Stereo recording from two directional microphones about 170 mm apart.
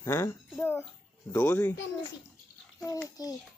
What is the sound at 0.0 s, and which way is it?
Speech, 15° left (ahead or behind).